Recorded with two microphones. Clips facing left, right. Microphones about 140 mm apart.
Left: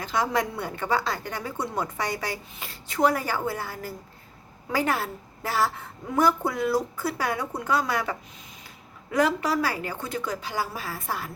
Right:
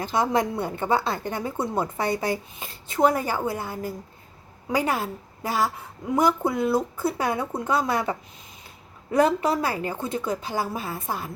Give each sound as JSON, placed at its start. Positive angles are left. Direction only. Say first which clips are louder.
{"t": 0.1, "sound": "a woman's voice", "louder": "right 2 dB", "side_deg": -25}